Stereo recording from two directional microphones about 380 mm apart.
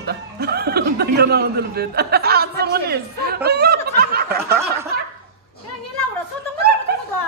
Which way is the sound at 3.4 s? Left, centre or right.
Right.